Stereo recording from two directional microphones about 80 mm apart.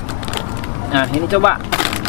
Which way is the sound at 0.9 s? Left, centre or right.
Left.